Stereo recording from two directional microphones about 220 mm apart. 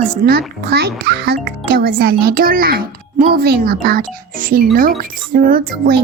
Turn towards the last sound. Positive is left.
turn(degrees=-40)  # may be behind; listen again after turning